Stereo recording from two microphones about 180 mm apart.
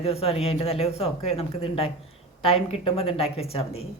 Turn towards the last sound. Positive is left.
turn(degrees=35)  # may be behind; listen again after turning